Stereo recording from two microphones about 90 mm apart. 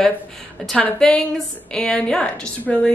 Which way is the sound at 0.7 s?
10° left (ahead or behind).